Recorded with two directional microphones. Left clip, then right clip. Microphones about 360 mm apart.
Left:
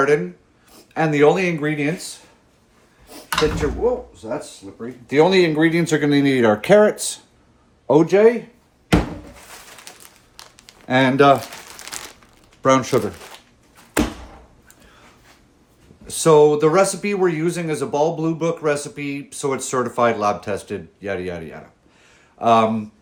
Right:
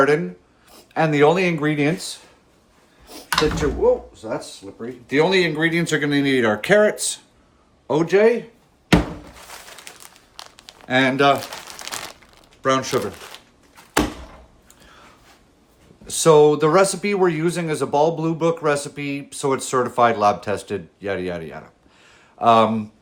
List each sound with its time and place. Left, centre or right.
0.7 s speech: centre
3.1 s speech: centre
10.3 s crumpling: centre
10.8 s speech: centre
12.6 s speech: centre
16.0 s speech: centre